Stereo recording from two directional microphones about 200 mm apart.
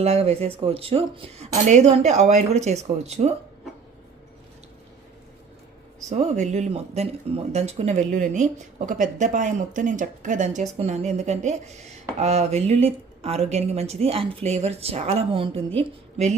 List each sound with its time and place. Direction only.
0.0 s speech: 30° right (ahead or behind)
6.1 s speech: 35° right (ahead or behind)